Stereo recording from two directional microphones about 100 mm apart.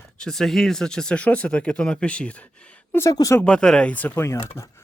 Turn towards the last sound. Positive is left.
turn(degrees=30)  # may be behind; listen again after turning